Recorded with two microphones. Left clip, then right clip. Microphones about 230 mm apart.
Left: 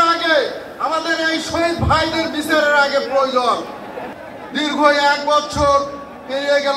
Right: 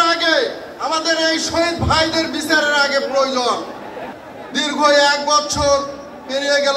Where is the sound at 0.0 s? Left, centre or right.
Right.